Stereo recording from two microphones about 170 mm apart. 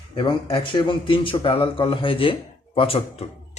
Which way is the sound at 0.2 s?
30° left (ahead or behind).